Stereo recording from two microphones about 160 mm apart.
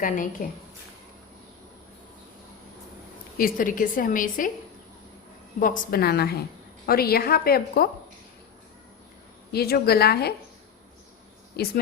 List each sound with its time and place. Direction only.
0.0 s a woman's voice: 55° left (ahead or behind)
3.3 s a woman's voice: 60° left (ahead or behind)
5.5 s a woman's voice: 55° left (ahead or behind)
9.5 s a woman's voice: 75° left (ahead or behind)
11.5 s speech: 75° left (ahead or behind)